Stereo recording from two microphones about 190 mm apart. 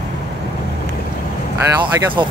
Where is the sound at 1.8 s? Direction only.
25° right (ahead or behind).